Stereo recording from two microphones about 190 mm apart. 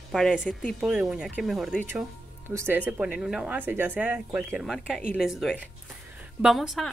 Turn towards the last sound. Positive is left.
turn(degrees=0)  # may be behind; listen again after turning